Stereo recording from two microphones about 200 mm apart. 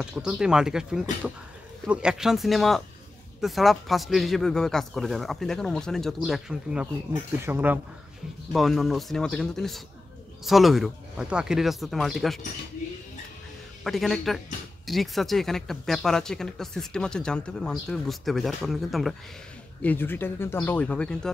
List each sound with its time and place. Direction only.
0.0 s speech: 5° right (ahead or behind)
13.8 s speech: centre (ahead or behind)